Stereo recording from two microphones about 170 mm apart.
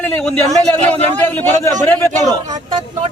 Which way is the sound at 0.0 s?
5° left (ahead or behind).